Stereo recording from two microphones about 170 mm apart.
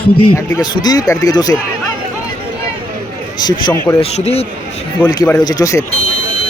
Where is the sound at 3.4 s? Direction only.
25° left (ahead or behind).